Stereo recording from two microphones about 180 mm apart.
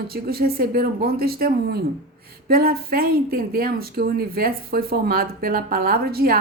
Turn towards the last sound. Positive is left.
turn(degrees=-55)  # may be behind; listen again after turning